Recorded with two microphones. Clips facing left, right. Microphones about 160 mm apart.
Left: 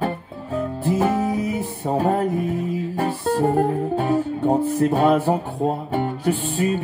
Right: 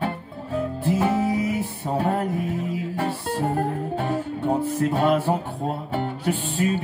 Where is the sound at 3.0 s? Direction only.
45° left (ahead or behind).